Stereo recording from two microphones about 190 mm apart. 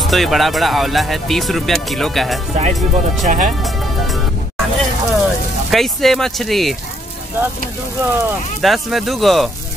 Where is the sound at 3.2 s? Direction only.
40° right (ahead or behind).